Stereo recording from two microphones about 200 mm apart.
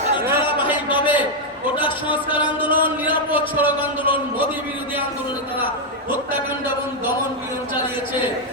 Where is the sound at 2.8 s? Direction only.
10° right (ahead or behind).